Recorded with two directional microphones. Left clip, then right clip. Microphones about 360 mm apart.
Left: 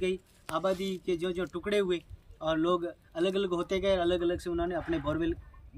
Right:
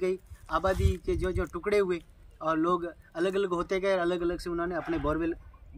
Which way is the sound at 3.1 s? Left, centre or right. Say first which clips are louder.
Right 1 dB; centre.